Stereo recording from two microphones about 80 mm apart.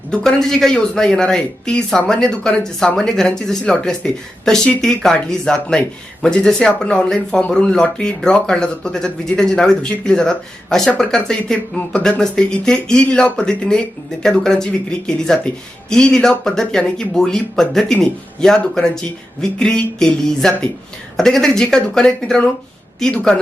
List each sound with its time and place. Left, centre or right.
0.1 s speech: centre